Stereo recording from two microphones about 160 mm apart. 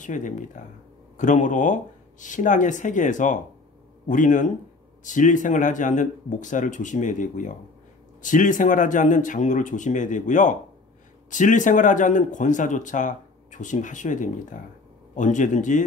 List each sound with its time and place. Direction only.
0.0 s speech: 55° left (ahead or behind)